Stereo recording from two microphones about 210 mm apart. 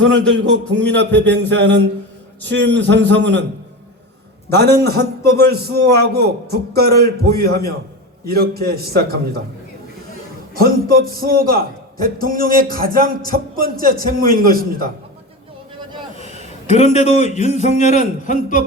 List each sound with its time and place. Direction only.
0.0 s a sound: 60° right (ahead or behind)
4.5 s a man's voice: 50° right (ahead or behind)
10.5 s a man's voice: 45° right (ahead or behind)
16.3 s a man's voice: 30° left (ahead or behind)